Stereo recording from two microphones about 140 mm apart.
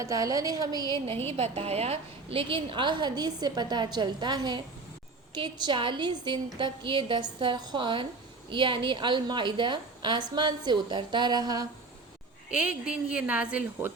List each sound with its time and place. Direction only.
0.0 s a woman's voice: 25° right (ahead or behind)
1.4 s a woman's voice: 45° right (ahead or behind); by 11.7 s 30° right (ahead or behind)
12.8 s a woman's voice: 10° right (ahead or behind)